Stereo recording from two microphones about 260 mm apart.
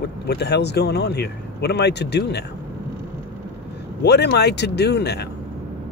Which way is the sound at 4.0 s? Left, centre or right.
Left.